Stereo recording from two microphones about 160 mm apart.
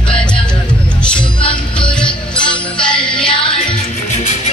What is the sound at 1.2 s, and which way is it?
Music, 30° left (ahead or behind).